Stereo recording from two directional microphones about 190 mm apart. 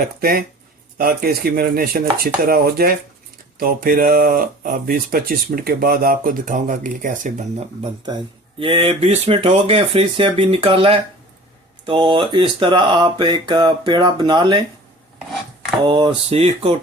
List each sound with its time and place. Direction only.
0.2 s speech: 50° right (ahead or behind)
8.0 s speech: 25° right (ahead or behind)
15.9 s speech: 25° right (ahead or behind)